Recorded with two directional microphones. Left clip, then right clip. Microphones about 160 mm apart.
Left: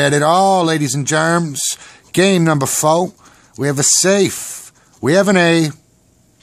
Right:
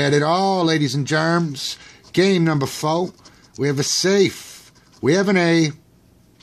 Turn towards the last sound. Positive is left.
turn(degrees=30)  # may be behind; listen again after turning